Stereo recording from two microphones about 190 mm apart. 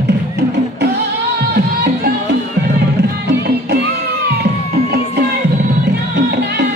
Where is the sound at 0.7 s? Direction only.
60° right (ahead or behind).